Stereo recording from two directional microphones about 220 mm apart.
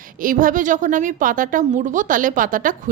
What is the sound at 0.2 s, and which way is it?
A woman's voice, 40° right (ahead or behind).